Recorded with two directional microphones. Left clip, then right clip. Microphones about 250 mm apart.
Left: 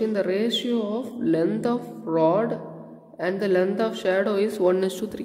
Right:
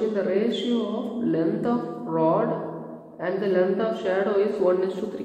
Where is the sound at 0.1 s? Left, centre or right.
Left.